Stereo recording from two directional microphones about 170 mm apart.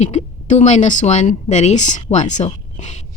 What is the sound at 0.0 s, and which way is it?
A woman's voice, 40° left (ahead or behind).